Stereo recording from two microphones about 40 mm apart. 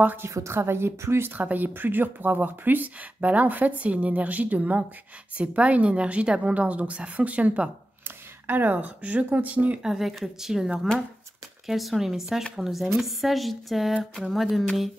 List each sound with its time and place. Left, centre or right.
0.2 s a woman's voice: right
1.3 s speech: right
8.5 s speech: right
9.8 s speech: centre
11.6 s speech: centre